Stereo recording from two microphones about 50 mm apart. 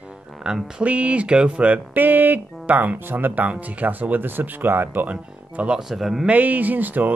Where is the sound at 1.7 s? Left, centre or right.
Right.